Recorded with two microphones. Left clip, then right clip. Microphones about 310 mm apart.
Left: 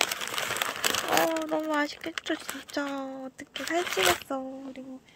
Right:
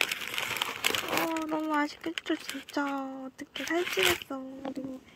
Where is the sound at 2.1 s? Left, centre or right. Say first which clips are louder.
Left 1 dB; centre.